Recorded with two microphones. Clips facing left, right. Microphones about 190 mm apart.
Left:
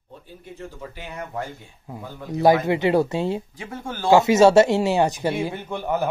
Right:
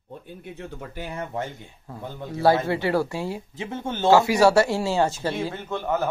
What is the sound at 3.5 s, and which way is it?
Speech, 25° right (ahead or behind).